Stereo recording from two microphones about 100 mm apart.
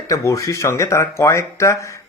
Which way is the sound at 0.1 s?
35° left (ahead or behind).